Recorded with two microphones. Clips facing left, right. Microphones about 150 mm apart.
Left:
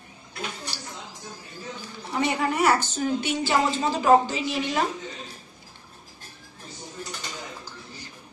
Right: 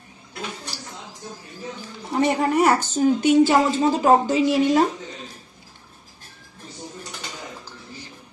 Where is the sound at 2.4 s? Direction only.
45° right (ahead or behind).